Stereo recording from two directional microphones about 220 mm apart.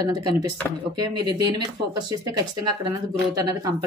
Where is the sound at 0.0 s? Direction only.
15° right (ahead or behind).